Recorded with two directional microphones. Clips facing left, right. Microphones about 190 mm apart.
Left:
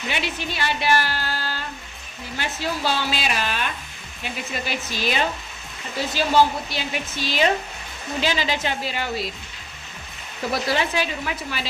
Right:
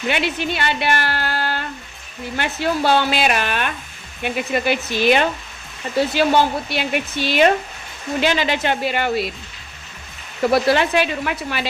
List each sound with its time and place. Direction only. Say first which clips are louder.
0.1 s a woman's voice: right 7 dB; 60° right (ahead or behind)
10.5 s speech: right 7 dB; 65° right (ahead or behind)